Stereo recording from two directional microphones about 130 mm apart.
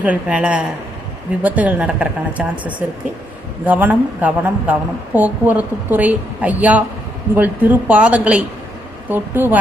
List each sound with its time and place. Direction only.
0.0 s a woman's voice: 10° right (ahead or behind)